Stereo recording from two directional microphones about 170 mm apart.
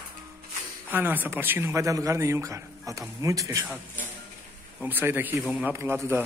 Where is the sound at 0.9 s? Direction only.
10° right (ahead or behind).